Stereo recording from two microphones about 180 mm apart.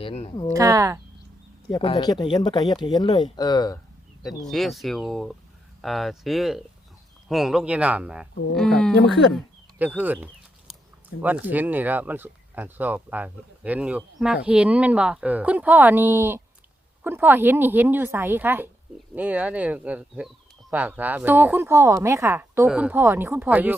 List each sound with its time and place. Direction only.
0.0 s speech: 35° left (ahead or behind)
0.5 s speech: 20° right (ahead or behind)
1.6 s speech: 25° left (ahead or behind)
4.4 s speech: centre (ahead or behind)
10.0 s speech: 10° right (ahead or behind)